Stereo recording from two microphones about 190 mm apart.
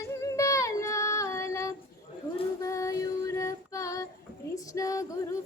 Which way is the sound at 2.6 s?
15° left (ahead or behind).